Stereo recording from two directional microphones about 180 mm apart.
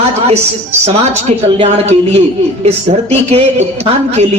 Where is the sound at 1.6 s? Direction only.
35° right (ahead or behind).